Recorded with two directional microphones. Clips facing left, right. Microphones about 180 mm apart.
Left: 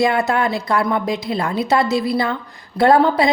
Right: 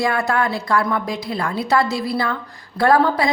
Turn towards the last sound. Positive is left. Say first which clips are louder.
# left 3 dB
turn(degrees=25)  # may be behind; listen again after turning